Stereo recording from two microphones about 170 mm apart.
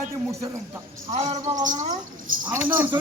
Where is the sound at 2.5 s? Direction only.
10° right (ahead or behind).